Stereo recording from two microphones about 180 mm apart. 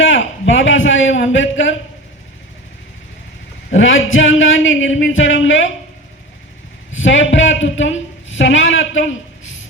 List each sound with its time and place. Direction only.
0.0 s a man's voice: 90° left
3.7 s a man's voice: 90° left
6.9 s a woman's voice: 90° left